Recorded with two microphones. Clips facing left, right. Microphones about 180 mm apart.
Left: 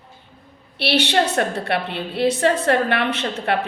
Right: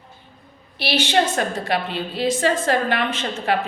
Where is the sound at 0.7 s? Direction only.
65° left (ahead or behind).